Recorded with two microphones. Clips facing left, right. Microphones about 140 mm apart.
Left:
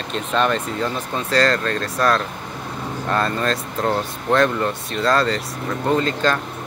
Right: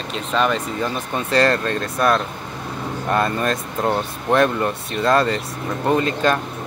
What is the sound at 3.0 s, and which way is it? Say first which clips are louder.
Speech: right 1 dB; 15° right (ahead or behind).